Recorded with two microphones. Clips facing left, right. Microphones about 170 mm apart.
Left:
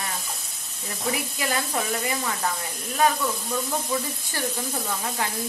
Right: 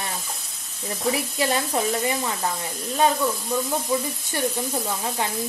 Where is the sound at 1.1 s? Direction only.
30° right (ahead or behind).